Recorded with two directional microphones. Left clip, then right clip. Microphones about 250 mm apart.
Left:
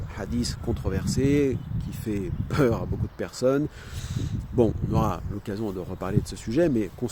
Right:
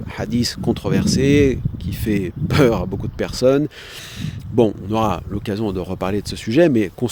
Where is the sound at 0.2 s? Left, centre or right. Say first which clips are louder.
Right 9 dB; right.